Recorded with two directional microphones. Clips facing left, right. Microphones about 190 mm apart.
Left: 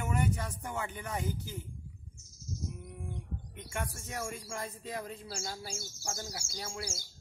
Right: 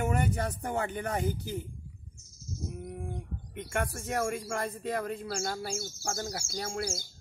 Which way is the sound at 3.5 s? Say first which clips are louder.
Right 7 dB; 65° right (ahead or behind).